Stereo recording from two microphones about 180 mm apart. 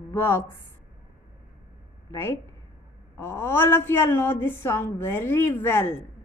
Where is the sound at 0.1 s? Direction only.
10° left (ahead or behind).